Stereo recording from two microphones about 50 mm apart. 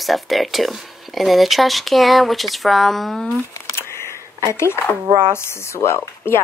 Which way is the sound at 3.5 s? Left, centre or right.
Left.